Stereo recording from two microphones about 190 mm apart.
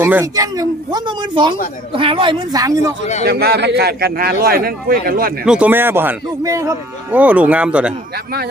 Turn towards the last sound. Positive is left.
turn(degrees=-5)  # may be behind; listen again after turning